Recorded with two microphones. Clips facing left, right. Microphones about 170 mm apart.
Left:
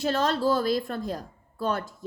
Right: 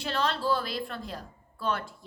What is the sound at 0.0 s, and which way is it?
A woman's voice, 45° left (ahead or behind).